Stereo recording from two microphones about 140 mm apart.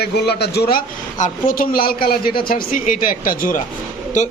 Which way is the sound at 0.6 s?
90° left.